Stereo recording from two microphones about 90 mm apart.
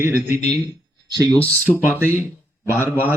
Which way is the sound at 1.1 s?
45° right (ahead or behind).